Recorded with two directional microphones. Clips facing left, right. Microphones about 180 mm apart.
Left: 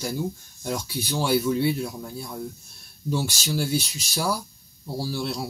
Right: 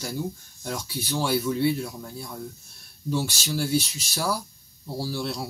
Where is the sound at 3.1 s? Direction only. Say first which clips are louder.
Left 1 dB; 15° left (ahead or behind).